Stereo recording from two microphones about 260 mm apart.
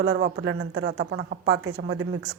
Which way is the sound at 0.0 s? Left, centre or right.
Right.